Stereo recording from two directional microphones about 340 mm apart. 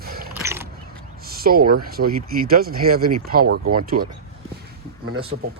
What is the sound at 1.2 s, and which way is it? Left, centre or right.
Speech, right.